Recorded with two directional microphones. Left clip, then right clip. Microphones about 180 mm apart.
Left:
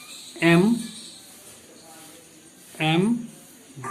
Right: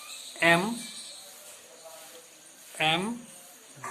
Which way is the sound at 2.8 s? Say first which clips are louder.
Left 3 dB; 20° right (ahead or behind).